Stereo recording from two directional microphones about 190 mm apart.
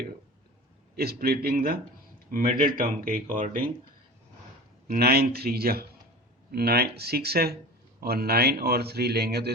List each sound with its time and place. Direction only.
0.9 s speech: 55° right (ahead or behind)
4.9 s speech: 55° right (ahead or behind)